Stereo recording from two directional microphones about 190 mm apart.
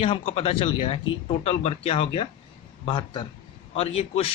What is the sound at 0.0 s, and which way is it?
A man's voice, 30° left (ahead or behind).